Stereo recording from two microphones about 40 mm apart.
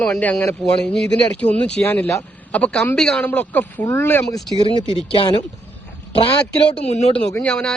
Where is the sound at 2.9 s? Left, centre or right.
Centre.